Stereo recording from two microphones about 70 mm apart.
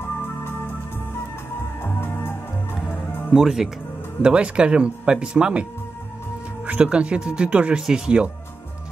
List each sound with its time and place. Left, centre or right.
1.8 s music: left
3.3 s speech: centre